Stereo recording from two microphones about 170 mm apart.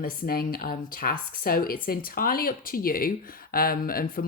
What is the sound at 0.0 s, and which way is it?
Speech, 60° left (ahead or behind).